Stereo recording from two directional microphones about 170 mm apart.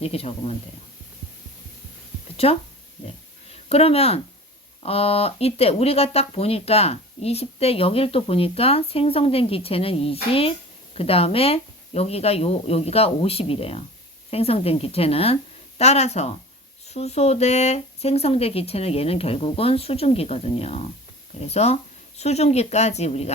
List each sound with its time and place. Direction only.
0.0 s speech: 35° left (ahead or behind)
2.3 s a woman's voice: 35° left (ahead or behind)